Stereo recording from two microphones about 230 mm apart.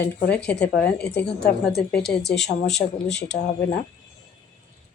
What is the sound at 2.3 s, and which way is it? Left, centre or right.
Speech, centre.